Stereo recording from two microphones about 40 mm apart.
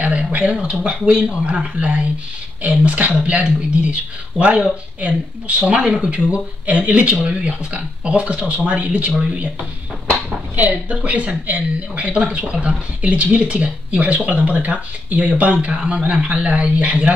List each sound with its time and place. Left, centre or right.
0.0 s speech: right
0.7 s speech: right
5.6 s speech: right
10.5 s a woman's voice: right
11.1 s speech: right